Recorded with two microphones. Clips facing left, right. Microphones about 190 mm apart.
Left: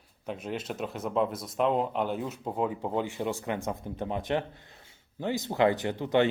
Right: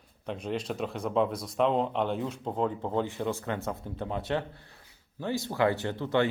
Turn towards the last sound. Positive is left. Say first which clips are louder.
# left 2 dB
turn(degrees=15)  # may be behind; listen again after turning